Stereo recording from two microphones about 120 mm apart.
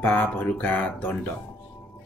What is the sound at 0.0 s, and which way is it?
Speech, 15° left (ahead or behind).